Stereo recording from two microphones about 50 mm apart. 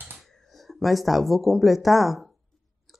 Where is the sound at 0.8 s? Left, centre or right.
Centre.